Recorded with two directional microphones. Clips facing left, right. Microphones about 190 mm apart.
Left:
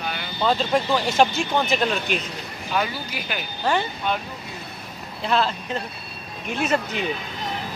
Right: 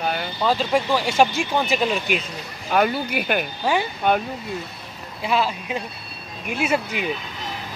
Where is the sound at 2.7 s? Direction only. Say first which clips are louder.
Right 6 dB; 55° right (ahead or behind).